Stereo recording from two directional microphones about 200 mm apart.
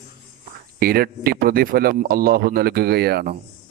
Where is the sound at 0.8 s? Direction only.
50° right (ahead or behind).